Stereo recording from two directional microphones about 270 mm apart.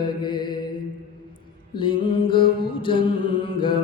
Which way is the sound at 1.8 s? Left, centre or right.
Centre.